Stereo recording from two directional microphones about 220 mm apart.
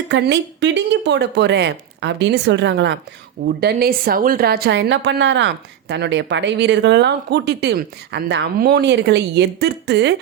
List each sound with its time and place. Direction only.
0.1 s a woman's voice: 50° right (ahead or behind)